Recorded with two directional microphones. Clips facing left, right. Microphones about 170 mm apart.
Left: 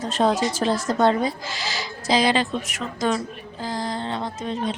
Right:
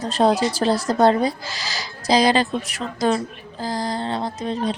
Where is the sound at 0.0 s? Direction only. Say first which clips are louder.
Right 3 dB; 35° right (ahead or behind).